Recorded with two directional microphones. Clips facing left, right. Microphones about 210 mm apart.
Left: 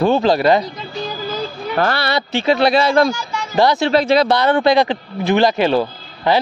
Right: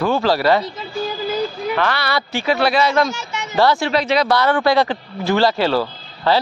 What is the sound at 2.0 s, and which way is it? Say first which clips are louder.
Speech: left 3 dB; 25° left (ahead or behind).